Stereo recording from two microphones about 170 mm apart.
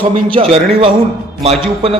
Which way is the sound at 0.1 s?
35° right (ahead or behind).